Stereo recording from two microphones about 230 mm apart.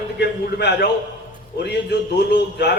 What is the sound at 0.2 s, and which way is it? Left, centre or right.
Speech, left.